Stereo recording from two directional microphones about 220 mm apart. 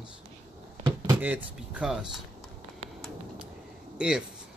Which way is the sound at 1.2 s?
5° right (ahead or behind).